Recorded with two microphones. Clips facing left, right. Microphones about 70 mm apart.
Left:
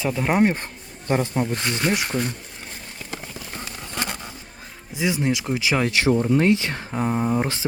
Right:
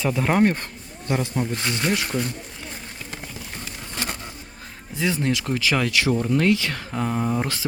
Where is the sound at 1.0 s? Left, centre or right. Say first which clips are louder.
Left 2 dB; left.